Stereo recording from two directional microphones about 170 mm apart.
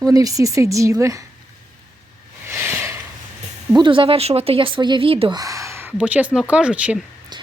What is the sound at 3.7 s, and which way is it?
Speech, 30° right (ahead or behind).